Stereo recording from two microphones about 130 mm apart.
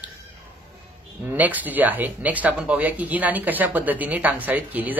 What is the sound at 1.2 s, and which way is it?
Speech, 15° right (ahead or behind).